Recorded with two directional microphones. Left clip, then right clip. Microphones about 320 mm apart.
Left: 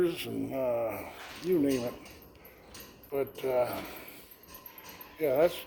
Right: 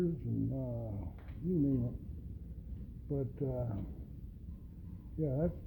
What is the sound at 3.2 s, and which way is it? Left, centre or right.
Speech, centre.